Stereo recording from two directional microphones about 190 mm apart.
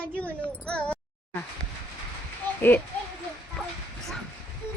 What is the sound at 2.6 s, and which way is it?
Speech, 10° left (ahead or behind).